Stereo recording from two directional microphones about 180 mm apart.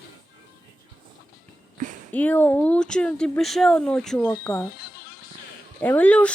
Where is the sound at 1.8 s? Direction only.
45° right (ahead or behind).